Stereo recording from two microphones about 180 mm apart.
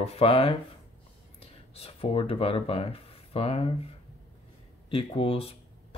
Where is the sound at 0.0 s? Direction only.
35° left (ahead or behind).